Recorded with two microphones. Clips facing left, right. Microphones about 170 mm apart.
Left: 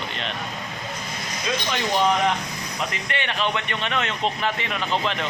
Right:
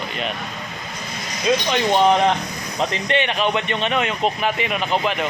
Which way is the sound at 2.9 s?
20° right (ahead or behind).